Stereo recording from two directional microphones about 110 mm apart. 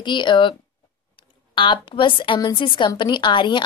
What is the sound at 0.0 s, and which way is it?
A woman's voice, 45° left (ahead or behind).